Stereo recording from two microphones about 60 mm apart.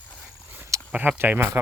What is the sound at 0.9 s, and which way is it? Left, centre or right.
Speech, right.